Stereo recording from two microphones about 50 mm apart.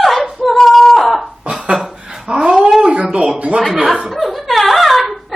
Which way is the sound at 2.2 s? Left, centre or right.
Centre.